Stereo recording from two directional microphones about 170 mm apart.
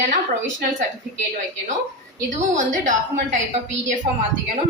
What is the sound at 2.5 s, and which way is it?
Speech, 45° right (ahead or behind).